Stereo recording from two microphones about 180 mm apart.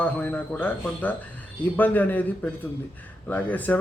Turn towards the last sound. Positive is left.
turn(degrees=10)  # may be behind; listen again after turning